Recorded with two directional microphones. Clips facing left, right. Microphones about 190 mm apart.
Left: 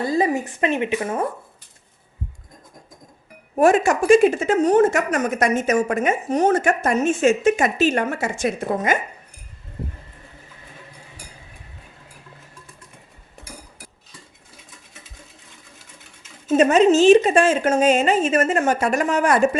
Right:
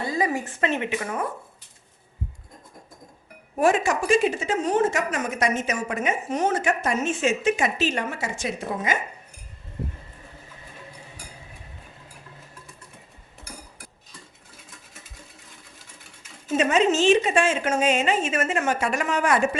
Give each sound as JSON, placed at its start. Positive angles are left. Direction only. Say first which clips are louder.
{"t": 0.3, "sound": "a woman's voice", "louder": "left 4 dB", "side_deg": 15}
{"t": 3.6, "sound": "a woman's voice", "louder": "left 5 dB", "side_deg": 50}
{"t": 16.6, "sound": "a woman's voice", "louder": "left 6 dB", "side_deg": 40}